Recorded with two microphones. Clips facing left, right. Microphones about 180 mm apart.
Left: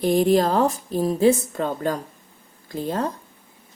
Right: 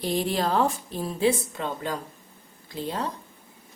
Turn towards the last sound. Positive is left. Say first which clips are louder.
# left 5 dB
turn(degrees=45)  # may be behind; listen again after turning